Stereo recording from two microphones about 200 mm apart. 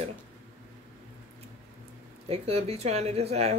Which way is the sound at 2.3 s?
30° right (ahead or behind).